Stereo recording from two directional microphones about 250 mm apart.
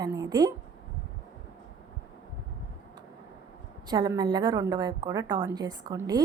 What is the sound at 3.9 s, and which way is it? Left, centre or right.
A woman's voice, centre.